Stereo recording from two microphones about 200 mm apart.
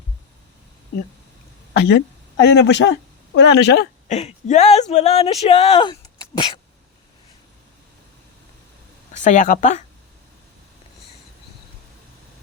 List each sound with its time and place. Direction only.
1.8 s a woman's voice: 55° left (ahead or behind)
4.1 s speech: 35° left (ahead or behind)
9.1 s speech: 40° left (ahead or behind)